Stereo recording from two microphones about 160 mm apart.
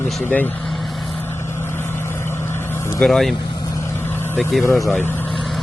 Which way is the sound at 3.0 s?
Centre (ahead or behind).